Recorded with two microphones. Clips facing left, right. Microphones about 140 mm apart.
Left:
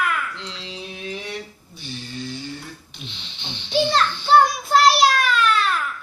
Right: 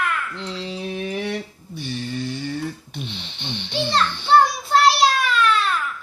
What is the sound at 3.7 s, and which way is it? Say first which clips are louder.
Child singing: left 3 dB; centre (ahead or behind).